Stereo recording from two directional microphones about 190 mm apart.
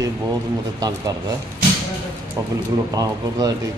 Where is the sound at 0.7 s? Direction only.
20° right (ahead or behind).